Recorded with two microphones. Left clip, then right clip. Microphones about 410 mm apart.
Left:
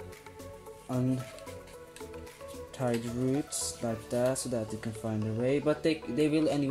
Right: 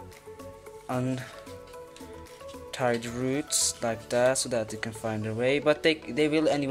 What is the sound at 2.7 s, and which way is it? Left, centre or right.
Speech, right.